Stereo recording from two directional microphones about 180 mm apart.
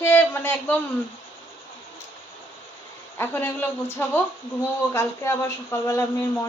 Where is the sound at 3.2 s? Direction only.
10° left (ahead or behind).